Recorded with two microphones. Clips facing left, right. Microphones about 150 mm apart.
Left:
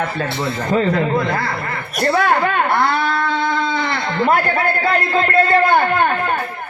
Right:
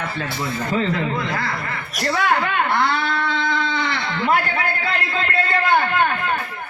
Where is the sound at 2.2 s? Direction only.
45° left (ahead or behind).